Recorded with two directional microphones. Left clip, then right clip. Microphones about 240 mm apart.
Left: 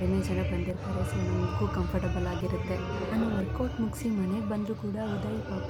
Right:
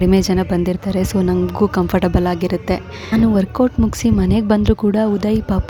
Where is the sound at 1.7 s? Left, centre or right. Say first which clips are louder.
Right 16 dB; right.